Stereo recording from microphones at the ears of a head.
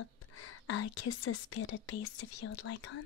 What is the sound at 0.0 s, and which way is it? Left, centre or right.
Speech, left.